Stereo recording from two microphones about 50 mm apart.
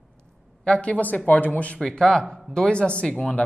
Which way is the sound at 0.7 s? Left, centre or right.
Left.